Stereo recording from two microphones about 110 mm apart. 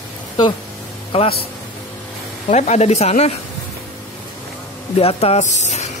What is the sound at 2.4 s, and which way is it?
Speech, 90° left.